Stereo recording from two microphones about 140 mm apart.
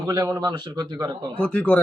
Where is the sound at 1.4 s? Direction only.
10° left (ahead or behind).